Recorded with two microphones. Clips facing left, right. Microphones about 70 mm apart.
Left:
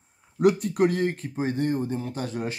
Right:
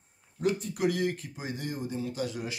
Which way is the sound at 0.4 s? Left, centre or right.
Left.